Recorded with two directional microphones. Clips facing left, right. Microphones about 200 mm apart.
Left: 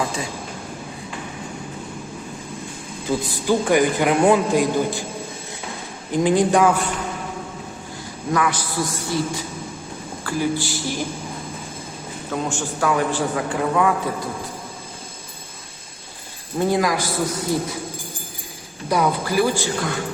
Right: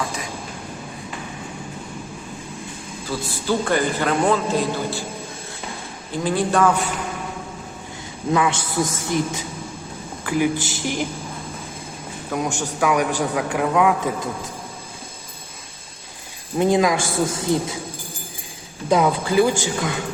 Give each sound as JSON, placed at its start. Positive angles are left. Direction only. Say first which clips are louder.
{"t": 3.1, "sound": "a man's voice", "louder": "left 3 dB", "side_deg": 15}
{"t": 6.1, "sound": "a man's voice", "louder": "left 4 dB", "side_deg": 15}
{"t": 8.3, "sound": "a man's voice", "louder": "right 1 dB", "side_deg": -25}
{"t": 12.3, "sound": "a man's voice", "louder": "right 1 dB", "side_deg": -10}
{"t": 16.6, "sound": "speech", "louder": "right 2 dB", "side_deg": -20}
{"t": 18.9, "sound": "speech", "louder": "right 2 dB", "side_deg": -20}